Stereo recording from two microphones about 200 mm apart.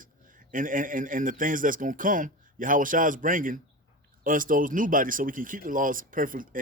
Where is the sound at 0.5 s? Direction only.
40° right (ahead or behind).